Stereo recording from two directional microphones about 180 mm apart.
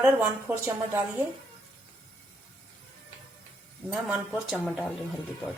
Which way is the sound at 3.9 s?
5° right (ahead or behind).